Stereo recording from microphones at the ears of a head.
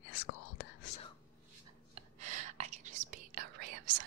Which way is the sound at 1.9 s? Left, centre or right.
Right.